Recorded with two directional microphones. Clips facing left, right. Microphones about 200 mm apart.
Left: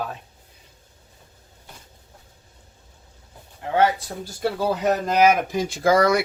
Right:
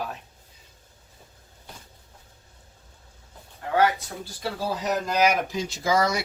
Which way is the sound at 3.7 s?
25° left (ahead or behind).